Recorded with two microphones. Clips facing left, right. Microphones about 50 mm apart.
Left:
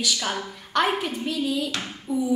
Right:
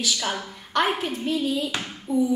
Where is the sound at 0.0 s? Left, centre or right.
Centre.